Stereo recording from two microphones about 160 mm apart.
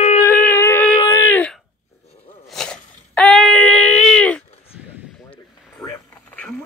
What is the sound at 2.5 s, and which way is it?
Wail, 5° left (ahead or behind).